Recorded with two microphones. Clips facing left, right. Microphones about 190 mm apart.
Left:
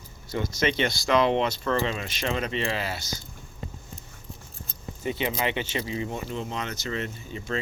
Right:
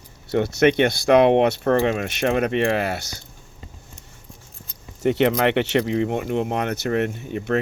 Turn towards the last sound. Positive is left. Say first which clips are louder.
# right 9 dB
turn(degrees=-60)  # may be behind; listen again after turning